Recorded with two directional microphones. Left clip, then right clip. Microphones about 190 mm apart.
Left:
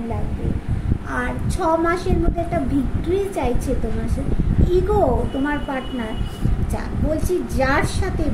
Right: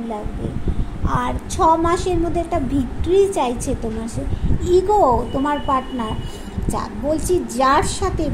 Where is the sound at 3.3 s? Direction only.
25° right (ahead or behind).